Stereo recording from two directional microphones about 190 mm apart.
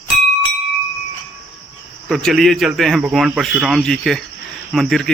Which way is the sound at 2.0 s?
Centre (ahead or behind).